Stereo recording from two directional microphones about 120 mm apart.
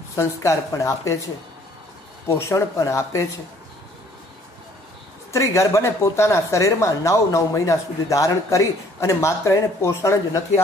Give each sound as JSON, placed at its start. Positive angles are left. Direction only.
{"t": 0.1, "sound": "speech", "side_deg": 25}
{"t": 2.2, "sound": "speech", "side_deg": 25}
{"t": 5.3, "sound": "speech", "side_deg": 25}